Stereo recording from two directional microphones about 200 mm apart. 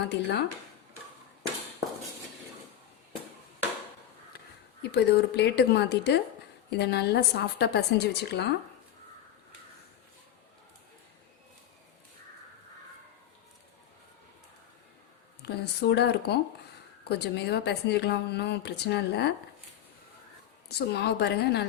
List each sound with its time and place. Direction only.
0.1 s a woman's voice: 55° left (ahead or behind)
4.8 s a woman's voice: 55° left (ahead or behind)
15.4 s a woman's voice: 55° left (ahead or behind)
20.7 s a woman's voice: 55° left (ahead or behind)